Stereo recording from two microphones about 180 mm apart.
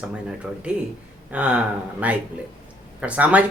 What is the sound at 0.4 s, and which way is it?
Speech, centre (ahead or behind).